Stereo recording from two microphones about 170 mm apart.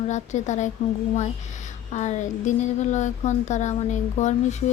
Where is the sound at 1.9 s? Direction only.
45° left (ahead or behind).